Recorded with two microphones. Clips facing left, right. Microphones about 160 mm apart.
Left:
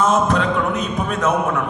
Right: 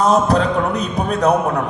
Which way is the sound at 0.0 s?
35° right (ahead or behind).